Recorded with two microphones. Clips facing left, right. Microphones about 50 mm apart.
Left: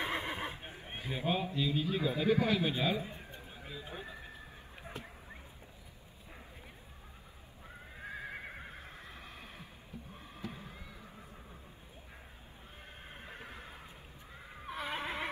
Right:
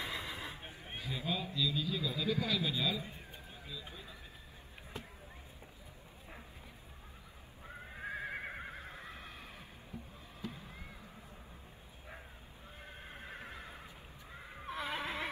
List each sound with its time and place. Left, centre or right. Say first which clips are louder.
0.0 s neigh: left 5 dB; left
0.9 s a man's voice: left 4 dB; left
7.6 s neigh: right 3 dB; centre
8.1 s neigh: right 2 dB; right
8.6 s neigh: right 2 dB; right
10.4 s music: even; left
13.1 s neigh: even; right
14.3 s neigh: even; centre